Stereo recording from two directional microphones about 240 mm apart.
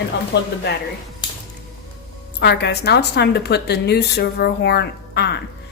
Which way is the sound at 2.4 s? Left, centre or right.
Left.